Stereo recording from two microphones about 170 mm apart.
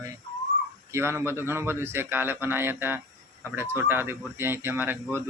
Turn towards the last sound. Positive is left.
turn(degrees=-15)  # may be behind; listen again after turning